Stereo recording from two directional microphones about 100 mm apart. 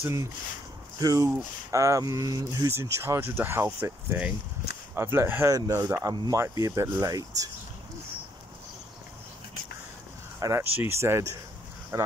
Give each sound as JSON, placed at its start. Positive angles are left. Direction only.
{"t": 0.0, "sound": "speech", "side_deg": -30}
{"t": 2.7, "sound": "speech", "side_deg": -25}
{"t": 10.4, "sound": "speech", "side_deg": -25}